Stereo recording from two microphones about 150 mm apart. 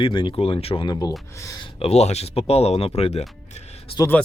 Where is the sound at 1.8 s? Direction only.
45° left (ahead or behind).